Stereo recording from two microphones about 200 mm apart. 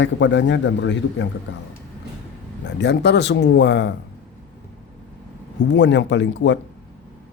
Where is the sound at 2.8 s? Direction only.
55° left (ahead or behind).